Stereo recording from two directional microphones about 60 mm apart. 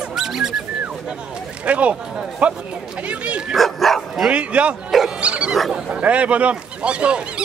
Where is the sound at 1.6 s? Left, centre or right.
Right.